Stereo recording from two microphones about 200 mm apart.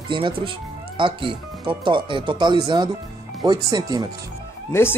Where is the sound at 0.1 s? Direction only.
25° right (ahead or behind).